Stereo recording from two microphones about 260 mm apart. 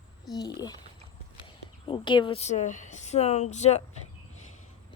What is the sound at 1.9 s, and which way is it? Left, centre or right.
Speech, centre.